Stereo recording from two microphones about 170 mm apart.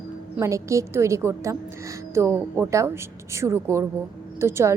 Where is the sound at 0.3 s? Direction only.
15° right (ahead or behind).